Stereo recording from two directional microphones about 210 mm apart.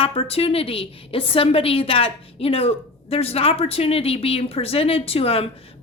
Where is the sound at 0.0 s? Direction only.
25° left (ahead or behind).